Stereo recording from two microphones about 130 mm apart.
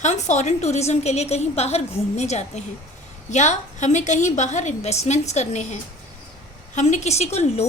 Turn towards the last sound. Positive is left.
turn(degrees=55)  # may be behind; listen again after turning